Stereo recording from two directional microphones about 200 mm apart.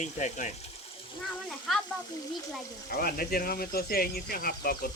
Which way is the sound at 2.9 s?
50° left (ahead or behind).